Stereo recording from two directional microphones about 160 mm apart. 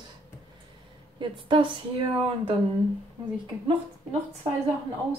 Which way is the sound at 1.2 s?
30° right (ahead or behind).